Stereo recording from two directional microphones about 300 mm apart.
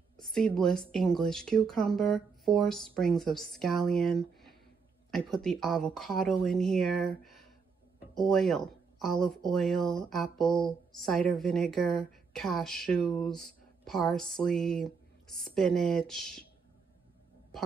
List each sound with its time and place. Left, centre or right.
0.2 s speech: centre